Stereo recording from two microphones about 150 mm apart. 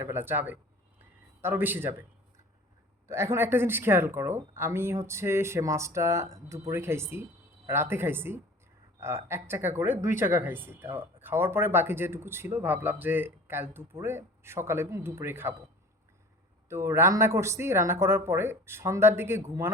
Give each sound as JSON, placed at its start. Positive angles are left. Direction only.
{"t": 0.0, "sound": "speech", "side_deg": -15}
{"t": 3.1, "sound": "speech", "side_deg": -20}
{"t": 16.6, "sound": "speech", "side_deg": -20}